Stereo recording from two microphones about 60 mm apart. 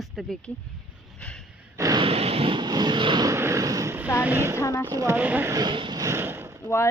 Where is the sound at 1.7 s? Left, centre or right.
Right.